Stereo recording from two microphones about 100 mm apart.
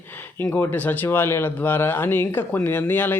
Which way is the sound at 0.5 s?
20° left (ahead or behind).